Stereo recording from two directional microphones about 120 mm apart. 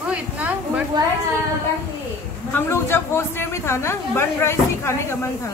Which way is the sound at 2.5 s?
20° left (ahead or behind).